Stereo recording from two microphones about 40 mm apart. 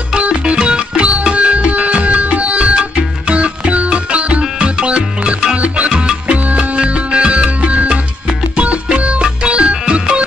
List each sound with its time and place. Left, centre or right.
0.2 s music: right